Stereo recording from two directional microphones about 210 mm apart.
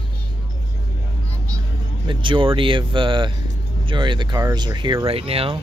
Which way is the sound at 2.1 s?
25° right (ahead or behind).